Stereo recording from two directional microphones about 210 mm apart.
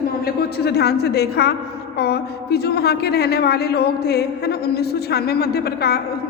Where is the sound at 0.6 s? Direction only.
50° left (ahead or behind).